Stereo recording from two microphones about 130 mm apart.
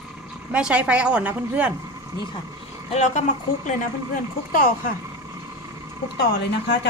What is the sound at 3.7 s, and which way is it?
Speech, 90° left.